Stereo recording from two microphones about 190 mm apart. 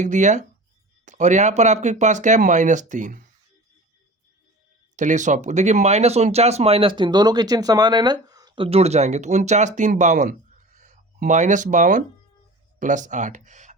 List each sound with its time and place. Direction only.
0.0 s speech: 40° right (ahead or behind)
4.9 s speech: 40° right (ahead or behind)